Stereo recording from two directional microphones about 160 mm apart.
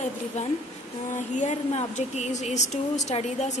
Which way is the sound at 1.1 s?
50° left (ahead or behind).